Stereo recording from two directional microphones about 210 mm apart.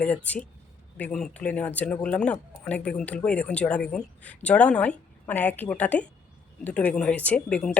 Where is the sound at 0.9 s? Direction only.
5° left (ahead or behind).